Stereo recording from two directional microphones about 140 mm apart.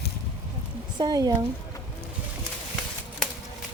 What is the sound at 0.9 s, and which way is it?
Speech, 30° right (ahead or behind).